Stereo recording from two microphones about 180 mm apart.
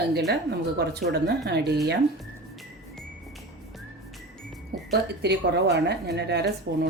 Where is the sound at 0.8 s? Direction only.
65° right (ahead or behind).